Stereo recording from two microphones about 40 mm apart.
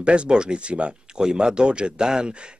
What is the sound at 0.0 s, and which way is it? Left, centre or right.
A man's voice, right.